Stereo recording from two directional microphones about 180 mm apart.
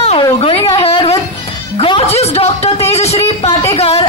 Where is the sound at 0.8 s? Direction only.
30° left (ahead or behind).